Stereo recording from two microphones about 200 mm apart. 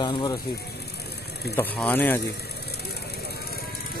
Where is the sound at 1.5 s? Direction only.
10° left (ahead or behind).